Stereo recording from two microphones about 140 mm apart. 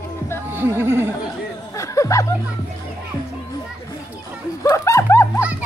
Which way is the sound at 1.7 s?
20° left (ahead or behind).